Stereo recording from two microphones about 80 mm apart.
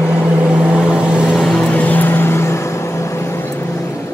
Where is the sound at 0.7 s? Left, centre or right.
Centre.